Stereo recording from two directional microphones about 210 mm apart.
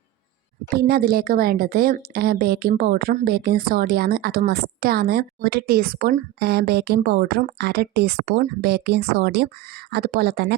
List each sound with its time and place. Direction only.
0.7 s a woman's voice: 45° right (ahead or behind)